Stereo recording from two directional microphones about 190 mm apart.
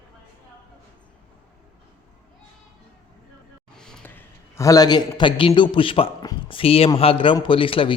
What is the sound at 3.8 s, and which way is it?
A man's voice, 5° left (ahead or behind).